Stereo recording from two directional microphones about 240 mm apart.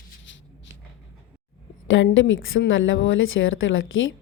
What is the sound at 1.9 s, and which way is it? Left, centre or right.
A woman's voice, left.